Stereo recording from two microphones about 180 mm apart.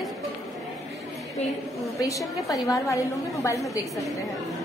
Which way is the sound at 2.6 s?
20° left (ahead or behind).